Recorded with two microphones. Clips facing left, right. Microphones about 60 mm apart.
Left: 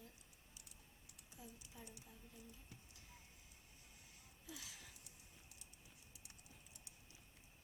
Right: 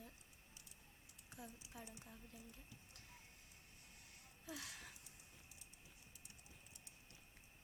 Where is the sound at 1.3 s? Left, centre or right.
Right.